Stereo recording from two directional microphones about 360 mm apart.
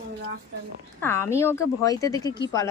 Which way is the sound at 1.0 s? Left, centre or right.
Centre.